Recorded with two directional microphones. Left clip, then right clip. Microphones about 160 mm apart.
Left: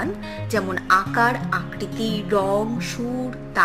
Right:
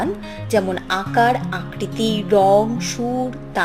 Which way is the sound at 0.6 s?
Centre (ahead or behind).